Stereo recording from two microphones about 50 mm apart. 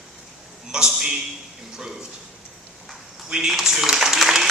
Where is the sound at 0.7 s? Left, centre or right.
Centre.